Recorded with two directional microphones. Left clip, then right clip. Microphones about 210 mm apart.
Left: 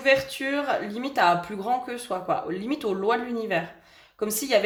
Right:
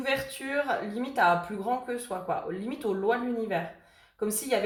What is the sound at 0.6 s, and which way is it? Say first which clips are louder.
A woman's voice: left 3 dB; 50° left (ahead or behind).